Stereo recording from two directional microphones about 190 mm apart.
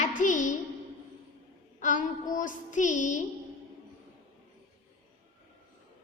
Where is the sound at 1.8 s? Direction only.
40° left (ahead or behind).